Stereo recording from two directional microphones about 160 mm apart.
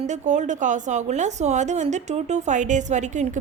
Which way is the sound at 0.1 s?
50° right (ahead or behind).